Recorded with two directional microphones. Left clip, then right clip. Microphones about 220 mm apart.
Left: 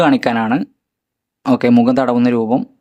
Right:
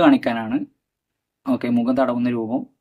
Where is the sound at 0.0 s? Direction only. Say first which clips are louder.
Left 3 dB; 50° left (ahead or behind).